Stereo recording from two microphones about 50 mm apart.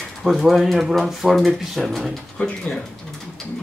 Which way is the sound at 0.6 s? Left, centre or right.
Centre.